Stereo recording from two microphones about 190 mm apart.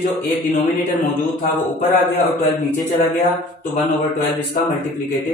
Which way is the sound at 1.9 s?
10° left (ahead or behind).